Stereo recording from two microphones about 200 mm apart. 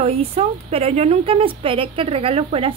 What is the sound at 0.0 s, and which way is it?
Speech, 30° right (ahead or behind).